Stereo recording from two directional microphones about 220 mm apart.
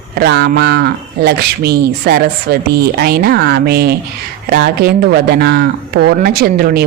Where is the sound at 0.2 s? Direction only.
50° right (ahead or behind).